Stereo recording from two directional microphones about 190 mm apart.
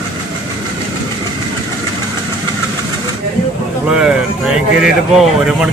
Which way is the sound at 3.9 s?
5° right (ahead or behind).